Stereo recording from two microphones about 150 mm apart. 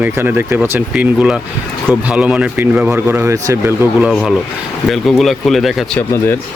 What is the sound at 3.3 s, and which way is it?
Speech, 20° right (ahead or behind).